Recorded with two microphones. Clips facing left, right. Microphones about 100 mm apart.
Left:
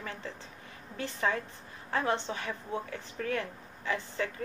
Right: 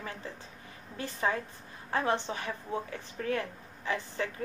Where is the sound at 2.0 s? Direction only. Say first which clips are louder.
Right 1 dB; 20° right (ahead or behind).